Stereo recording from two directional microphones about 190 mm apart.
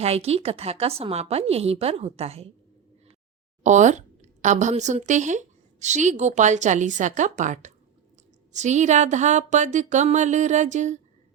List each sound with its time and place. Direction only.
0.0 s a woman's voice: 35° right (ahead or behind)
3.6 s a woman's voice: 40° right (ahead or behind)